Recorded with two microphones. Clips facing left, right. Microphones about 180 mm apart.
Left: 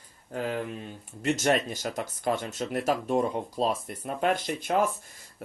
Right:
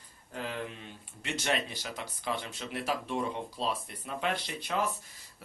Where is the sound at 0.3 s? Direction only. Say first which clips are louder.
Left 7 dB; 45° left (ahead or behind).